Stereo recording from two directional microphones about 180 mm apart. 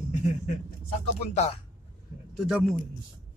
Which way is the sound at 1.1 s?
35° left (ahead or behind).